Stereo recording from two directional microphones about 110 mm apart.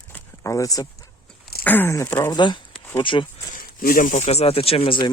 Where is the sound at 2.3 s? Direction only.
45° left (ahead or behind).